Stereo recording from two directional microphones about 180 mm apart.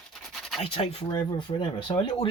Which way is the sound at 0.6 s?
30° left (ahead or behind).